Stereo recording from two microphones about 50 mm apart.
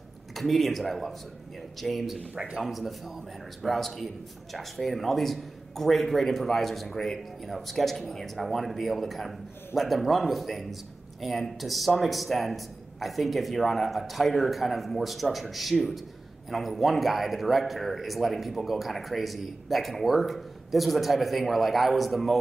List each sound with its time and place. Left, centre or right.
0.3 s a man's voice: centre
2.3 s speech: right
2.6 s a man's voice: centre